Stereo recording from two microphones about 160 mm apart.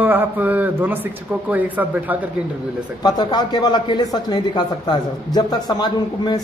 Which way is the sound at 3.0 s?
25° left (ahead or behind).